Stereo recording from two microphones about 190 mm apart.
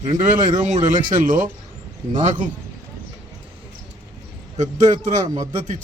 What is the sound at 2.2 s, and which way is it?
Speech, 40° right (ahead or behind).